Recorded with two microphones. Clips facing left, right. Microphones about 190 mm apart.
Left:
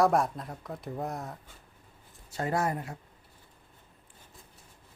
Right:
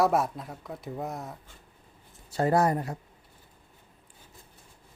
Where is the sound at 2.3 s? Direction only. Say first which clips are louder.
Right 6 dB; 35° right (ahead or behind).